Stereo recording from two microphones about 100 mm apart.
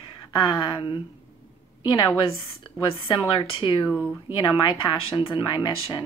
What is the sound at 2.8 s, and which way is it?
Speech, 60° left (ahead or behind).